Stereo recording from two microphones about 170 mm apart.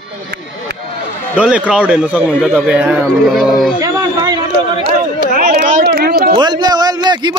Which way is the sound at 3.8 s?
25° right (ahead or behind).